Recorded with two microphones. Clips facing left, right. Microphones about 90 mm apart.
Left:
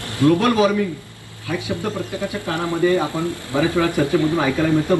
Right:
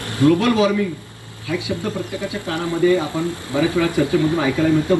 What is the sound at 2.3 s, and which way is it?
Speech, 20° right (ahead or behind).